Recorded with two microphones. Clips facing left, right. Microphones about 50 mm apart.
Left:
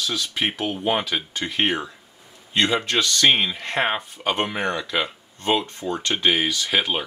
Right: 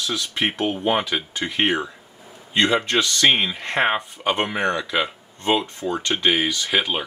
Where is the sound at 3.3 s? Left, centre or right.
Centre.